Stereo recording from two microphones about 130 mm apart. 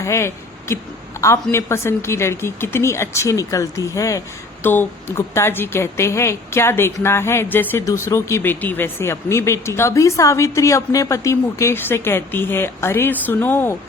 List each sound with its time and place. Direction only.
0.0 s a woman's voice: 20° left (ahead or behind)